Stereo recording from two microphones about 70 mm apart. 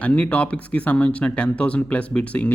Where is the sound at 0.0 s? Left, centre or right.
Centre.